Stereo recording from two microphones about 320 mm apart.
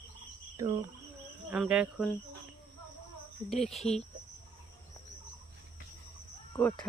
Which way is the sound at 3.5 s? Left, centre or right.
Centre.